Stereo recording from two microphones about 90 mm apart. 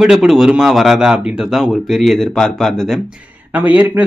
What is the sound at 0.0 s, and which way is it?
Speech, 5° right (ahead or behind).